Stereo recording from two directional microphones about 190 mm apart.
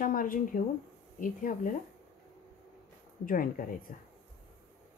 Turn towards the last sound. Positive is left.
turn(degrees=45)  # may be behind; listen again after turning